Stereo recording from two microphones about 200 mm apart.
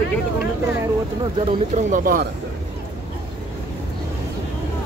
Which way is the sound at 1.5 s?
35° right (ahead or behind).